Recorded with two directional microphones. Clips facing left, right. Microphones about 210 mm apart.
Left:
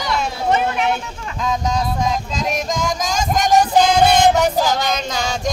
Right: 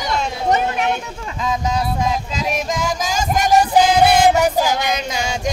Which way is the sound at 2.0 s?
5° right (ahead or behind).